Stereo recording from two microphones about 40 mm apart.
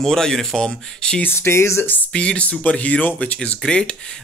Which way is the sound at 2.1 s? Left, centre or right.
Left.